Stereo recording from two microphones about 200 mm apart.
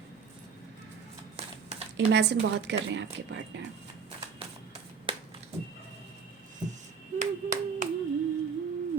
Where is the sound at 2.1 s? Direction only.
60° right (ahead or behind).